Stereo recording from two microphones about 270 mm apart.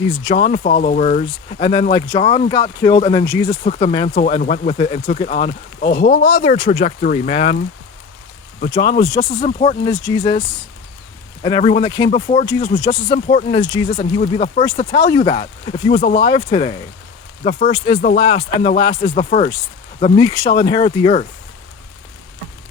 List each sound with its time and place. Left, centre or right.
0.0 s speech: left
3.6 s speech: left
8.7 s speech: centre
11.4 s speech: centre